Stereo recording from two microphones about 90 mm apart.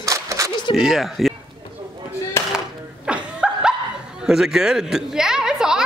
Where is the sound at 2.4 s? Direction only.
30° left (ahead or behind).